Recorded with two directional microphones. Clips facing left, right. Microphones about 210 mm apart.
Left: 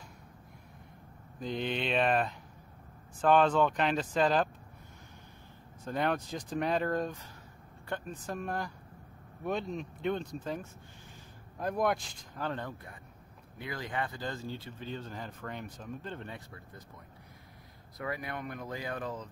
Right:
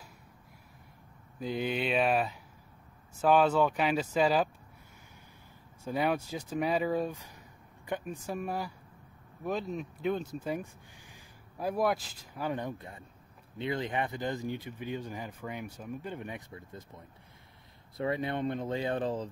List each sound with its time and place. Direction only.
1.4 s speech: 5° right (ahead or behind)
5.9 s speech: 10° right (ahead or behind)
17.9 s speech: 25° right (ahead or behind)